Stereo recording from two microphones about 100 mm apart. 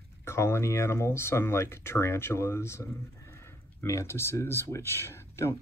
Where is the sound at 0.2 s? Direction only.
25° left (ahead or behind).